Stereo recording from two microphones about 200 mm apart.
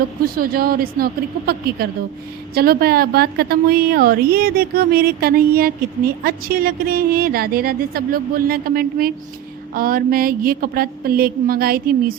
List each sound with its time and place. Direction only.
0.3 s a woman's voice: 45° right (ahead or behind)